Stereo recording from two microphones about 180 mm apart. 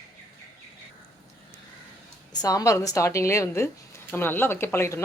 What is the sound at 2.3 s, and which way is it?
Speech, 20° left (ahead or behind).